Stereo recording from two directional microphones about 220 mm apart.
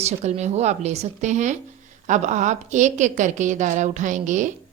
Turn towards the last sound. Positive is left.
turn(degrees=-35)  # may be behind; listen again after turning